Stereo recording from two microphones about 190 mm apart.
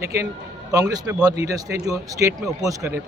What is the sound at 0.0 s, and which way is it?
A man's voice, 15° right (ahead or behind).